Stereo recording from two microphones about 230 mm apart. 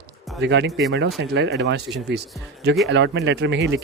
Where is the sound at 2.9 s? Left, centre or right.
Right.